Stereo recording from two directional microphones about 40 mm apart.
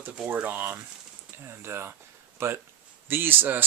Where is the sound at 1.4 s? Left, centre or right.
Right.